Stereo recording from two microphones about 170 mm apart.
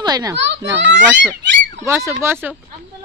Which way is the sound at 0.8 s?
90° right.